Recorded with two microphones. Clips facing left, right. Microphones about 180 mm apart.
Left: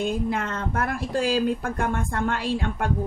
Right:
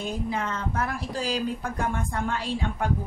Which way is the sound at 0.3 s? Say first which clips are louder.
Left 2 dB; 55° left (ahead or behind).